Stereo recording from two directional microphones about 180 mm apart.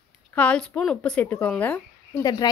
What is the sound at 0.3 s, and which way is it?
Speech, 5° left (ahead or behind).